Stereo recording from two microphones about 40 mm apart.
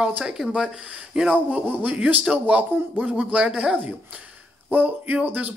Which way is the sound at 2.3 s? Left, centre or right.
Right.